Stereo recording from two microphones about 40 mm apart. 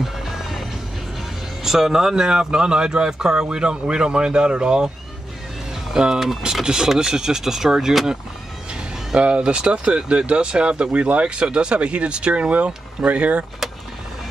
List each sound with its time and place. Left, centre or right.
0.0 s music: centre
1.6 s speech: centre
6.0 s speech: centre
9.1 s speech: right